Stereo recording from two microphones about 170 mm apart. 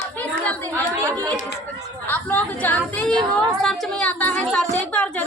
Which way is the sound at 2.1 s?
10° left (ahead or behind).